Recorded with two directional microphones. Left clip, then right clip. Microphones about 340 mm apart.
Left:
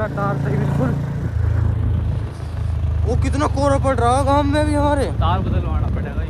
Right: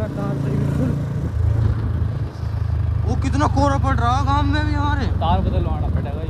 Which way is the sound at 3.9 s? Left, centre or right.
Centre.